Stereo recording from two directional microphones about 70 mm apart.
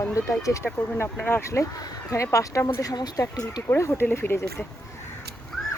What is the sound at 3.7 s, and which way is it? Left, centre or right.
Speech, left.